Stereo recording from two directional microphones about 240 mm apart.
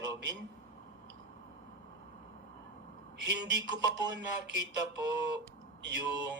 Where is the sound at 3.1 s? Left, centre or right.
Right.